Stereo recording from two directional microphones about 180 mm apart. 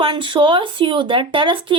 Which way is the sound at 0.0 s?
25° right (ahead or behind).